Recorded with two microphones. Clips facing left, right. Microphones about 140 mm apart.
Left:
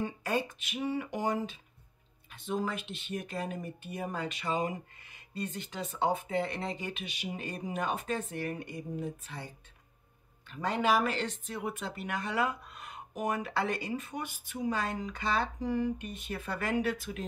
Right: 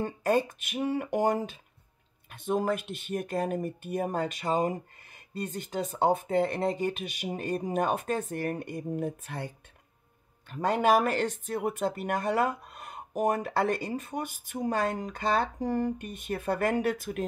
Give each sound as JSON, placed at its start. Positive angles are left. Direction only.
{"t": 0.0, "sound": "speech", "side_deg": -50}
{"t": 10.5, "sound": "speech", "side_deg": -45}